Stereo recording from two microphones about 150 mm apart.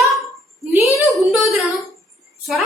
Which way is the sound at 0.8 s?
20° left (ahead or behind).